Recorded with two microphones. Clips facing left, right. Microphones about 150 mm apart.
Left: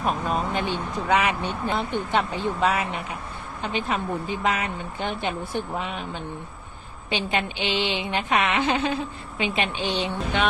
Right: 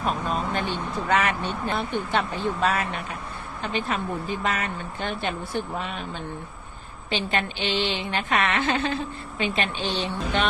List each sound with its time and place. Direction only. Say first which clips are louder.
0.0 s speech: left 1 dB; 15° left (ahead or behind)